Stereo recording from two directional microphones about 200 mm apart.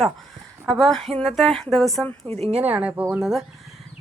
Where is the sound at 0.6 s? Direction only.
Centre (ahead or behind).